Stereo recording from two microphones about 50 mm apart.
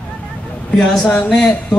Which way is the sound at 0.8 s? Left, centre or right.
Centre.